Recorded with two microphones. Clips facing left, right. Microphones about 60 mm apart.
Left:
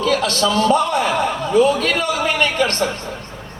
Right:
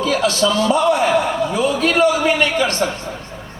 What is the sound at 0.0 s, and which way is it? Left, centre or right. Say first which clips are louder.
A man's voice: right 1 dB; left.